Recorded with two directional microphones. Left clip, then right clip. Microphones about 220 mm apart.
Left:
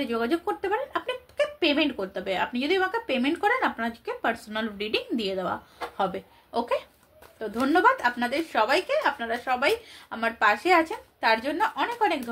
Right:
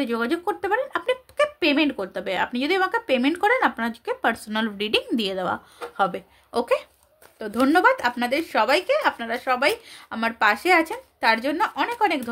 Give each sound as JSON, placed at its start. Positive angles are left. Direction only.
{"t": 0.0, "sound": "speech", "side_deg": -50}